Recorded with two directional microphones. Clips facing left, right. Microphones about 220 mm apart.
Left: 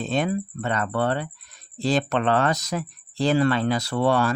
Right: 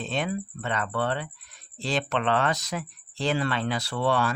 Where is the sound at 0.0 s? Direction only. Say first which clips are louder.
Left 5 dB; 40° left (ahead or behind).